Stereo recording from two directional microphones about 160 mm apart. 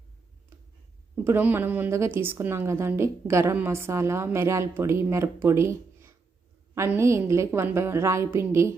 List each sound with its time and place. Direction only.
1.1 s a woman's voice: 15° right (ahead or behind)